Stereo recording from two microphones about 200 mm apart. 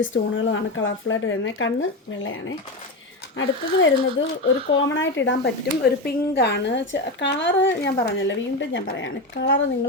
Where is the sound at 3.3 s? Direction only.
70° left (ahead or behind).